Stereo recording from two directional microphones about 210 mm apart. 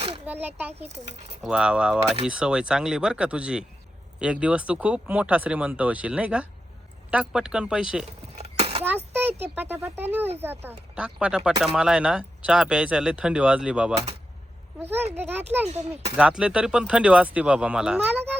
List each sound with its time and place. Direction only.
0.3 s speech: 10° right (ahead or behind)
0.7 s a child's voice: 30° right (ahead or behind)
1.4 s speech: 5° right (ahead or behind)
8.4 s a sound: 30° right (ahead or behind)
9.6 s speech: 10° right (ahead or behind)